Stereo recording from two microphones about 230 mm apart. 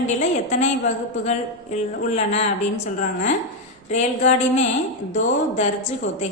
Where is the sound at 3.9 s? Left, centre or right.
Left.